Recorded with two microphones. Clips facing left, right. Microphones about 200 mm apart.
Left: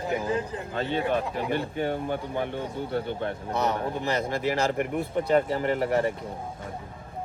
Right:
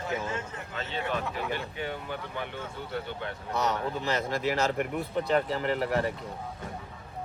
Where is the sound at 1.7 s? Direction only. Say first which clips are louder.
Left 7 dB; 45° left (ahead or behind).